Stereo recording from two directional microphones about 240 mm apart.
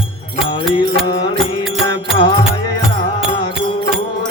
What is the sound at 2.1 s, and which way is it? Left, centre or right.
Music, centre.